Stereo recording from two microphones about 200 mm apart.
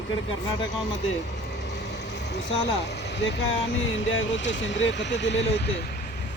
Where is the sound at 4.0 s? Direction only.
70° left (ahead or behind).